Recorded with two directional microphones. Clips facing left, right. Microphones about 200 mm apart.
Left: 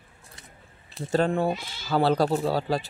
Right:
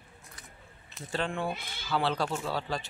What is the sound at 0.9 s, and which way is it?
Speech, 40° left (ahead or behind).